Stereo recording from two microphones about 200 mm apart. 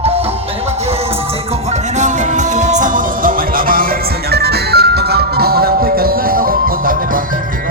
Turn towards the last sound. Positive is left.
turn(degrees=-45)  # may be behind; listen again after turning